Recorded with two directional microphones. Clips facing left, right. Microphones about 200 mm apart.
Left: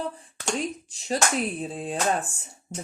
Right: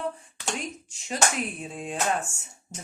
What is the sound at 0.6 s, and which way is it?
Chopping, 35° left (ahead or behind).